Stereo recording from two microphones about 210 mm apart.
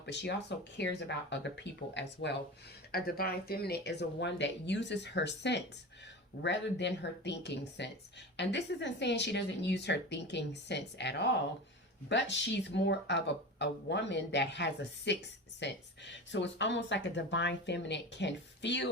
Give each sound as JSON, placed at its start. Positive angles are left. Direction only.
{"t": 0.0, "sound": "speech", "side_deg": 55}
{"t": 2.9, "sound": "speech", "side_deg": 45}